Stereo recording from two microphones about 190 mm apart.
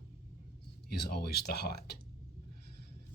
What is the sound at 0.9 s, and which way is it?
Speech, 55° left (ahead or behind).